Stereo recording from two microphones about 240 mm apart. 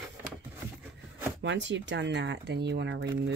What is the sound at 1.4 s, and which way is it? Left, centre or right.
Speech, right.